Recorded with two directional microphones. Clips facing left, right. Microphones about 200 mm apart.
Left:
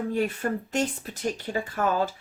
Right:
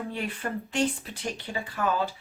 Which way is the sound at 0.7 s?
40° left (ahead or behind).